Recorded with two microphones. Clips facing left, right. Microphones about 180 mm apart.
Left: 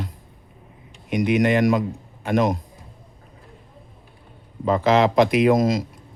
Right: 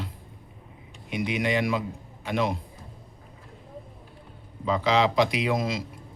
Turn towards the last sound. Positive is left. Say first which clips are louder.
# left 9 dB
turn(degrees=45)  # may be behind; listen again after turning